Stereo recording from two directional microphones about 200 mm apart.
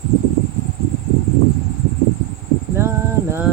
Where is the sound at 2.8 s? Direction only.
10° right (ahead or behind).